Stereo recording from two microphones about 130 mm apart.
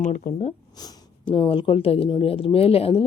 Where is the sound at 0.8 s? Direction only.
30° left (ahead or behind).